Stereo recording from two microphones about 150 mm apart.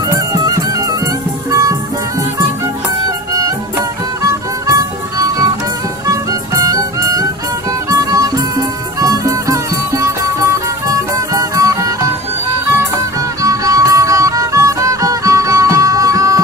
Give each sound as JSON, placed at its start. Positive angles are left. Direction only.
{"t": 0.1, "sound": "music", "side_deg": -25}
{"t": 3.3, "sound": "music", "side_deg": -20}
{"t": 6.6, "sound": "music", "side_deg": -25}
{"t": 13.1, "sound": "music", "side_deg": -20}